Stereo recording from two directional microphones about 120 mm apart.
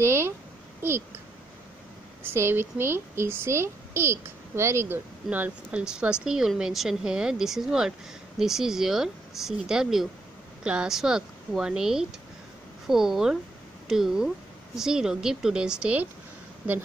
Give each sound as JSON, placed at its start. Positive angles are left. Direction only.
{"t": 0.0, "sound": "a sound", "side_deg": -20}
{"t": 0.8, "sound": "speech", "side_deg": -20}
{"t": 2.3, "sound": "speech", "side_deg": -20}